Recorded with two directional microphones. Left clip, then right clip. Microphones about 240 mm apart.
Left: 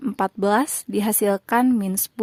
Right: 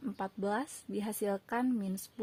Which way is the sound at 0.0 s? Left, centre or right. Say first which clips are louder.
Left 15 dB; left.